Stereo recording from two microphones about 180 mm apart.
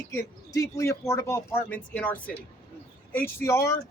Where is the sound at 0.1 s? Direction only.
15° left (ahead or behind).